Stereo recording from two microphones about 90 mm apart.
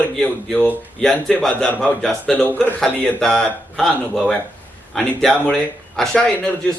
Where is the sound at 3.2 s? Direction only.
5° left (ahead or behind).